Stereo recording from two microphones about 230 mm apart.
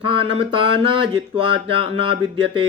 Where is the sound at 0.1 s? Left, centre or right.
Right.